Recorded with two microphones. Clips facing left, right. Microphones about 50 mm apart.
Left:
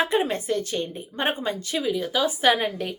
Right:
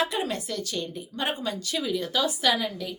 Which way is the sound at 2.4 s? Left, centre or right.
Left.